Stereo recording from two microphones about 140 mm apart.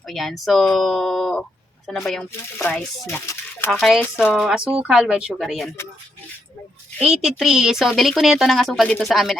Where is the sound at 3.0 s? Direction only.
15° left (ahead or behind).